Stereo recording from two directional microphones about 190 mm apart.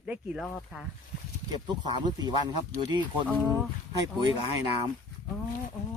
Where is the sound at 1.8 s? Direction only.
20° right (ahead or behind).